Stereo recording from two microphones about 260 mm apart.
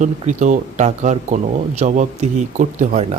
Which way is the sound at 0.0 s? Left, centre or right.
Right.